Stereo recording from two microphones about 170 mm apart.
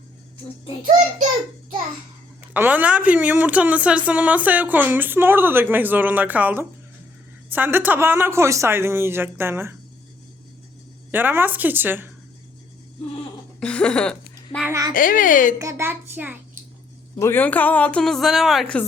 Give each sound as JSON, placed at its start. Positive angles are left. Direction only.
{"t": 2.5, "sound": "a woman's voice", "side_deg": -10}
{"t": 11.1, "sound": "a woman's voice", "side_deg": -10}
{"t": 13.6, "sound": "speech", "side_deg": 5}
{"t": 14.6, "sound": "speech", "side_deg": -20}
{"t": 14.9, "sound": "speech", "side_deg": 55}
{"t": 15.5, "sound": "a woman's voice", "side_deg": -15}
{"t": 17.2, "sound": "a woman's voice", "side_deg": 15}